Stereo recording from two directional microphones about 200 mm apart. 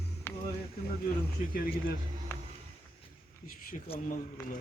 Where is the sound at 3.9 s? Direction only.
30° left (ahead or behind).